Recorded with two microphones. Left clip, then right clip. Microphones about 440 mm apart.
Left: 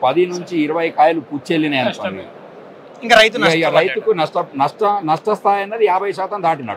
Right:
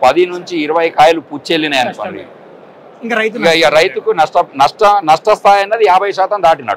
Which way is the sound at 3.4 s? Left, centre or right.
Right.